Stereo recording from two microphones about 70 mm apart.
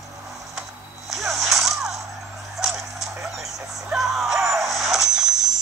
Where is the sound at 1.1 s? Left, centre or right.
Centre.